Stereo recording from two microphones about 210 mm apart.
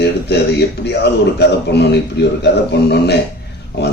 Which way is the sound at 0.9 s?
50° left (ahead or behind).